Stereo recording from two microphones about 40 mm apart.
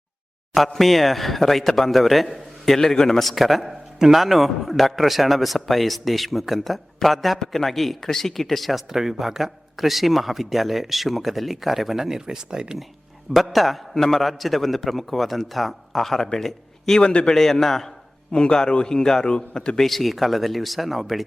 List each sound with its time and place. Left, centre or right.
0.7 s a man's voice: centre
3.2 s speech: centre
13.3 s speech: centre
16.5 s a sound: centre
17.0 s a man's voice: left
17.3 s a man's voice: centre
18.3 s a man's voice: left
19.8 s speech: centre